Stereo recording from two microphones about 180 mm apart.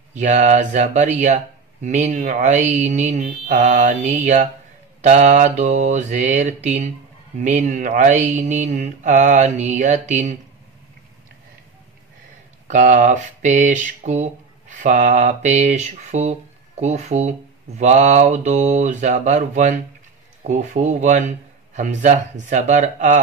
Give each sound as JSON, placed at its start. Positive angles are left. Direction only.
{"t": 0.1, "sound": "speech", "side_deg": -40}
{"t": 5.0, "sound": "mantra", "side_deg": -40}
{"t": 12.6, "sound": "mantra", "side_deg": -45}
{"t": 20.4, "sound": "speech", "side_deg": -40}